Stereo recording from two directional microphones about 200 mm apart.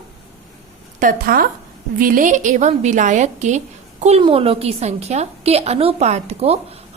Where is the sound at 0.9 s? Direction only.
45° right (ahead or behind).